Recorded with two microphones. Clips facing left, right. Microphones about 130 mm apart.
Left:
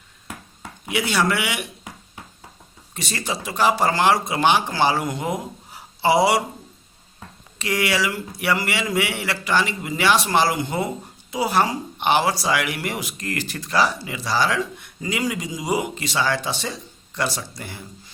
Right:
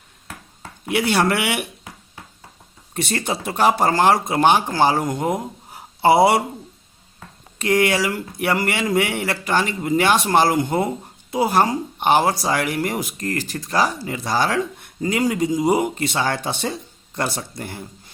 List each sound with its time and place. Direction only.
0.9 s speech: 55° right (ahead or behind)
2.9 s speech: 55° right (ahead or behind)
7.6 s speech: 50° right (ahead or behind)